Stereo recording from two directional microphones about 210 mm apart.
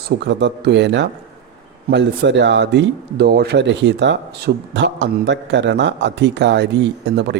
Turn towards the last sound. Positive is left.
turn(degrees=-55)  # may be behind; listen again after turning